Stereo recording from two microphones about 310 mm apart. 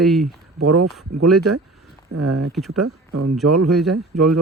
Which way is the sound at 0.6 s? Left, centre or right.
Right.